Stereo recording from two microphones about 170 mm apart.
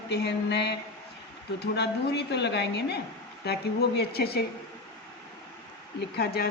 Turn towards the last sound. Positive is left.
turn(degrees=65)  # may be behind; listen again after turning